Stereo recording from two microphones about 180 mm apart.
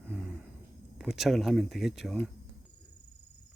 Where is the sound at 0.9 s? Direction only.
Centre (ahead or behind).